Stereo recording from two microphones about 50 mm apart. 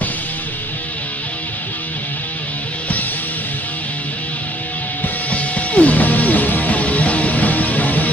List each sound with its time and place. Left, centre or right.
5.3 s music: left